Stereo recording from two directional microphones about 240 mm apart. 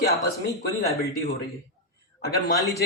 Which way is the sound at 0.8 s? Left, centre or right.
Centre.